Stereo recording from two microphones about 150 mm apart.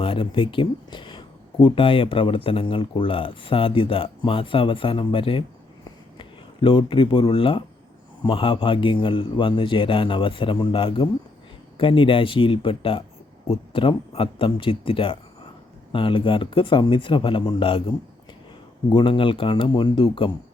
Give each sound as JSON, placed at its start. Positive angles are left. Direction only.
{"t": 0.0, "sound": "speech", "side_deg": 35}